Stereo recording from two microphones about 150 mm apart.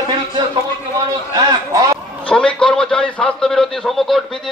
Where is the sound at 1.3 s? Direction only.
25° right (ahead or behind).